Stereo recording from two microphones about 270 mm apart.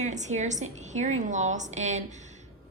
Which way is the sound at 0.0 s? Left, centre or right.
Right.